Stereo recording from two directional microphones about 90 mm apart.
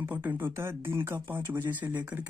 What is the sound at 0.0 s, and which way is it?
Speech, 20° right (ahead or behind).